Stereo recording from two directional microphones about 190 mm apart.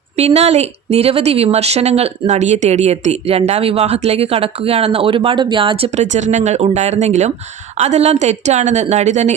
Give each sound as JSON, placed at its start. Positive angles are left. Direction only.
{"t": 0.2, "sound": "speech", "side_deg": -35}